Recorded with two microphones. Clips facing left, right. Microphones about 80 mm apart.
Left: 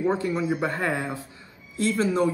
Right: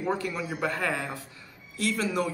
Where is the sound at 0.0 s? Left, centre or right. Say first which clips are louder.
Left 5 dB; left.